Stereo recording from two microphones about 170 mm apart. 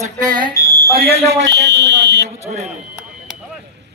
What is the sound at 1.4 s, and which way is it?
Speech, 90° right.